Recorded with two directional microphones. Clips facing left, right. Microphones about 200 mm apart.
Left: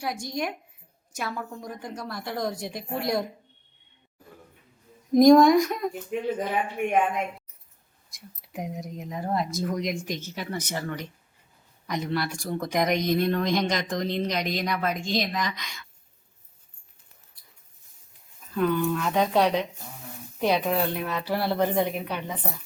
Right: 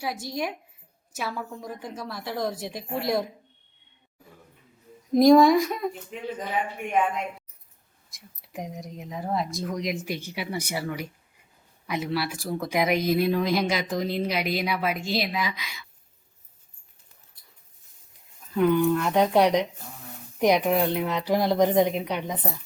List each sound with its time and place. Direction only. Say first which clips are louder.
0.0 s speech: even; centre (ahead or behind)
5.1 s speech: left 1 dB; centre (ahead or behind)
8.1 s speech: left 1 dB; centre (ahead or behind)
18.5 s speech: right 4 dB; 15° right (ahead or behind)